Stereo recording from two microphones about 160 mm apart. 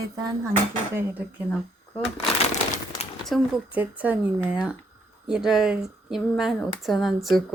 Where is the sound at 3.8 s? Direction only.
10° right (ahead or behind).